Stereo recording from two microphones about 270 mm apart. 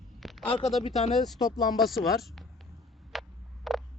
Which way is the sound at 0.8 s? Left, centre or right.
Left.